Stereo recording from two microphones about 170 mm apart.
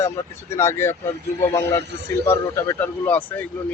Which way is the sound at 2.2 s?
15° left (ahead or behind).